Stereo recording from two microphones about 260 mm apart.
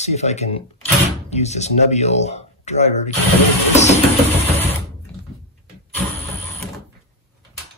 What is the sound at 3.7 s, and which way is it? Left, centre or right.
Music, left.